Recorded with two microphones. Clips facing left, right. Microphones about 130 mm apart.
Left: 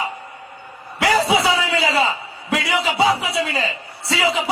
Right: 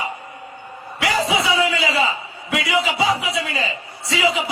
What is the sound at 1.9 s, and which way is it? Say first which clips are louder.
A man's voice: left 1 dB; 35° left (ahead or behind).